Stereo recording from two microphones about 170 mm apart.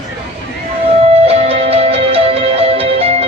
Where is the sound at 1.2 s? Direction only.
35° right (ahead or behind).